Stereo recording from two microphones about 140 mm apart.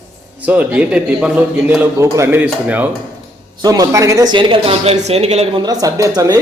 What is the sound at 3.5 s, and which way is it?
Speech, 30° right (ahead or behind).